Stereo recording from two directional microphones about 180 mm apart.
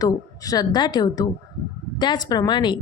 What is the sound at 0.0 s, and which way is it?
A woman's voice, 20° left (ahead or behind).